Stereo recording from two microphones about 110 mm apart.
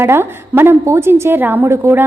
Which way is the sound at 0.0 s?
20° right (ahead or behind).